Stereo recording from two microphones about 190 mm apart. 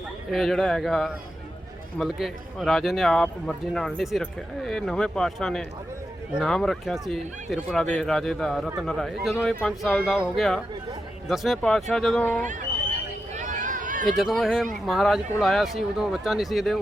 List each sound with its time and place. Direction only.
0.3 s a man's voice: centre (ahead or behind)
12.4 s speech: 40° right (ahead or behind)
13.3 s run: 40° right (ahead or behind)
14.1 s a man's voice: centre (ahead or behind)